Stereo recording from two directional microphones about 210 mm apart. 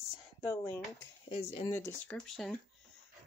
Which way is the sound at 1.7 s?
10° left (ahead or behind).